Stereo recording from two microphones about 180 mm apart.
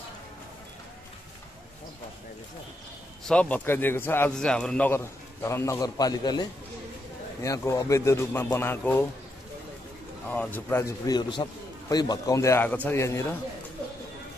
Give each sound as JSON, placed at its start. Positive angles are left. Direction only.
{"t": 3.3, "sound": "a man's voice", "side_deg": 5}
{"t": 7.4, "sound": "a man's voice", "side_deg": 20}
{"t": 10.3, "sound": "a man's voice", "side_deg": 10}